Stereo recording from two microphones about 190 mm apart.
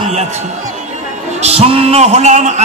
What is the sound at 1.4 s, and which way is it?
A man's voice, 30° right (ahead or behind).